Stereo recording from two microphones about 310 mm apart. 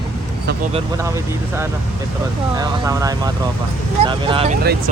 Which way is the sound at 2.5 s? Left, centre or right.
Centre.